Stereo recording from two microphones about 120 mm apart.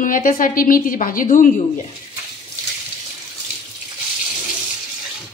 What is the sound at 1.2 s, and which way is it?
Speech, 90° left.